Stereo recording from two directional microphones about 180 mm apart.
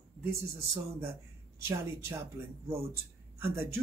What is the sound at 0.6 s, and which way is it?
Speech, 15° right (ahead or behind).